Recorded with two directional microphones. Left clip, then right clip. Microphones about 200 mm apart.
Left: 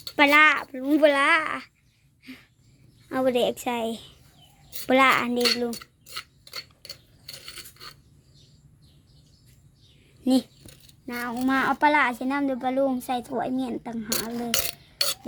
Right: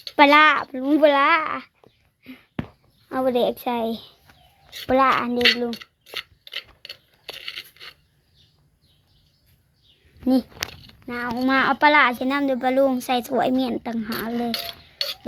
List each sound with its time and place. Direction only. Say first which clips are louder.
0.2 s speech: right 4 dB; 5° right (ahead or behind)
2.2 s a sound: right 1 dB; 5° left (ahead or behind)
3.1 s speech: right 2 dB; 5° left (ahead or behind)
4.9 s a child's voice: right 1 dB; 10° left (ahead or behind)
7.3 s a sound: right 8 dB; 30° left (ahead or behind)
10.2 s speech: right 3 dB; 5° right (ahead or behind)